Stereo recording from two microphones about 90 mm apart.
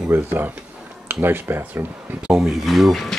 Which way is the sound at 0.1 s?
25° right (ahead or behind).